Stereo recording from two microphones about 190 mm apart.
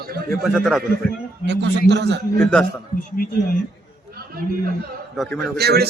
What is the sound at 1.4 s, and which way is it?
Speech, 65° right (ahead or behind).